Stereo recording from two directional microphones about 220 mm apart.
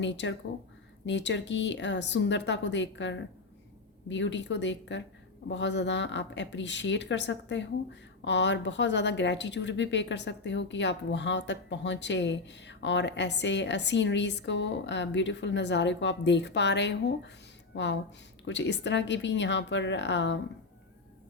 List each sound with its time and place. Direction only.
0.0 s a woman's voice: 55° left (ahead or behind)